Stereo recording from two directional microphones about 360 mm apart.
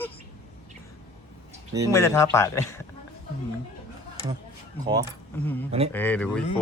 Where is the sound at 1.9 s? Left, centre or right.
Centre.